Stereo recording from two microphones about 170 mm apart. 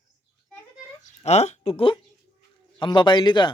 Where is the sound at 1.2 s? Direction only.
40° left (ahead or behind).